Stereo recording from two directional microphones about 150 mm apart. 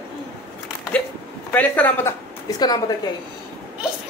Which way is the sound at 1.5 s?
10° left (ahead or behind).